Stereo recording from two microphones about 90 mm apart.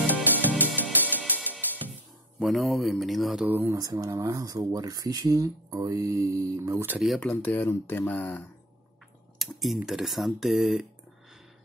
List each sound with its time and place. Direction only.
0.0 s music: 20° right (ahead or behind)
1.0 s music: 20° left (ahead or behind)
2.3 s speech: centre (ahead or behind)
3.4 s speech: 20° right (ahead or behind)
3.7 s speech: 40° right (ahead or behind)
7.2 s speech: 15° left (ahead or behind)
9.4 s typing: centre (ahead or behind)
9.8 s speech: centre (ahead or behind)